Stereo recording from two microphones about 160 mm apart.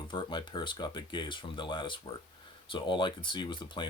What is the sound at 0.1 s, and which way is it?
Speech, 30° left (ahead or behind).